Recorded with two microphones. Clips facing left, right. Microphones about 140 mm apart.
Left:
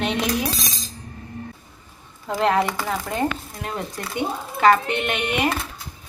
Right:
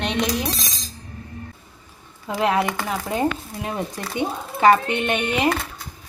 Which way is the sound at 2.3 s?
10° right (ahead or behind).